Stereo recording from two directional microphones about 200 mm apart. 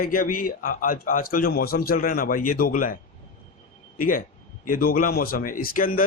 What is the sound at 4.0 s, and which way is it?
A man's voice, 45° left (ahead or behind).